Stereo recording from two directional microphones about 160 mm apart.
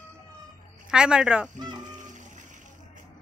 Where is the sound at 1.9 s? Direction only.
50° right (ahead or behind).